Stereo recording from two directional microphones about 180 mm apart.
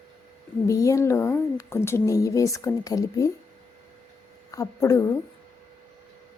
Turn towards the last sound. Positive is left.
turn(degrees=15)  # may be behind; listen again after turning